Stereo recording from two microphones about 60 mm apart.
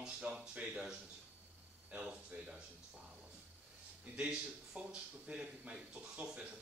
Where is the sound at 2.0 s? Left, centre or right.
Centre.